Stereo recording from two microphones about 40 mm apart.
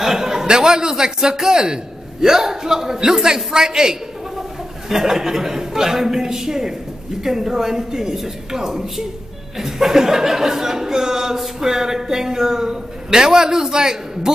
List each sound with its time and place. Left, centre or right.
0.0 s a man's voice: centre